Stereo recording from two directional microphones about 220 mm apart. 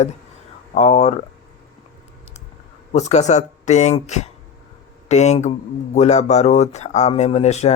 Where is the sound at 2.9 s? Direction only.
30° left (ahead or behind).